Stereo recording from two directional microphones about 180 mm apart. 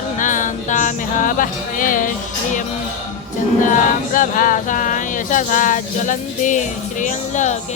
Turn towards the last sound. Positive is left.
turn(degrees=40)  # may be behind; listen again after turning